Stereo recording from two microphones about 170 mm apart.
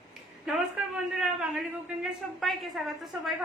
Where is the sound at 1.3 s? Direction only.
Centre (ahead or behind).